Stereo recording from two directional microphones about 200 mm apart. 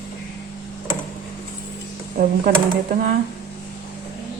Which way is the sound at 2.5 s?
55° right (ahead or behind).